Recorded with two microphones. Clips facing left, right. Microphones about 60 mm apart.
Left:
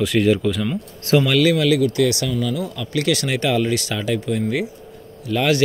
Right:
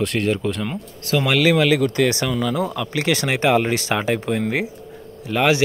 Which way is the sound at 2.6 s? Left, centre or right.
Right.